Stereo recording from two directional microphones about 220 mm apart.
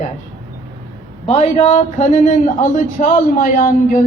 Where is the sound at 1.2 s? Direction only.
30° left (ahead or behind).